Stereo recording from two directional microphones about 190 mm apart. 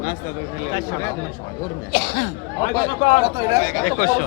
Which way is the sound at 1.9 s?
65° left (ahead or behind).